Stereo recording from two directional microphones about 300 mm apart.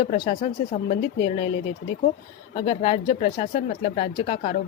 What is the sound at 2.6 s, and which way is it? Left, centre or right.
Speech, centre.